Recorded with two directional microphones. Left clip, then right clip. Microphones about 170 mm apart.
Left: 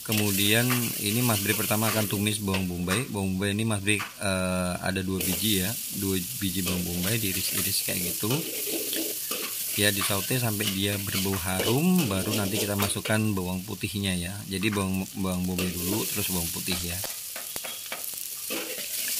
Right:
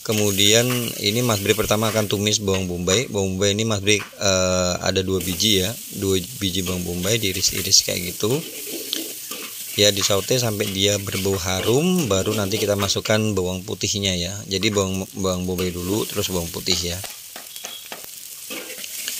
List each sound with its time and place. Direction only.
0.0 s speech: 25° right (ahead or behind)
9.8 s speech: 35° right (ahead or behind)